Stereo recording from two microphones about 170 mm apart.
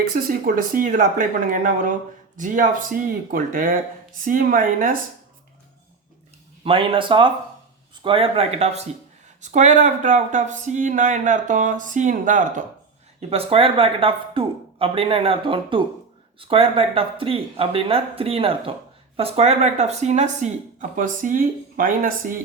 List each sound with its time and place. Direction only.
0.2 s speech: 55° right (ahead or behind)
6.7 s speech: 30° right (ahead or behind); by 12.6 s 50° right (ahead or behind)
13.1 s speech: 35° right (ahead or behind); by 22.4 s 55° right (ahead or behind)